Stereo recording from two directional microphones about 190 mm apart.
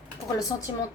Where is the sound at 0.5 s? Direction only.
20° left (ahead or behind).